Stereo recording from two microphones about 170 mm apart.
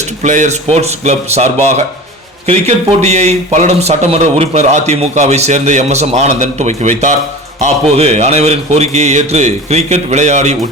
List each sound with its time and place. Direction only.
0.2 s speech: 45° right (ahead or behind)